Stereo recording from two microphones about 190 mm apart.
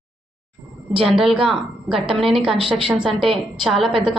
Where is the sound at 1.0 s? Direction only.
Centre (ahead or behind).